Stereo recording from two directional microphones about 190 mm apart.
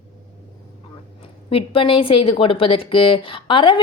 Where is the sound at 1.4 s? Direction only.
30° left (ahead or behind).